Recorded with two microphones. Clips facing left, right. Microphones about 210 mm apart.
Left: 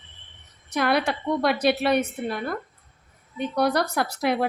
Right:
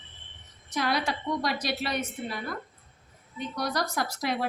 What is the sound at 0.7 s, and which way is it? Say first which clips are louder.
A woman's voice: left 6 dB; 60° left (ahead or behind).